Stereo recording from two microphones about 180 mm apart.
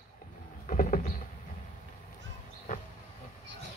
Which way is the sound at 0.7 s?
45° left (ahead or behind).